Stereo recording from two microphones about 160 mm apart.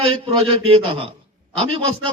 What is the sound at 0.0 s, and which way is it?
A man's voice, 35° right (ahead or behind).